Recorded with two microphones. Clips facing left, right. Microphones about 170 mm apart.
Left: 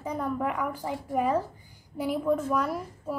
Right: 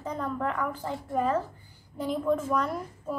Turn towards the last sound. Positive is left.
turn(degrees=5)  # may be behind; listen again after turning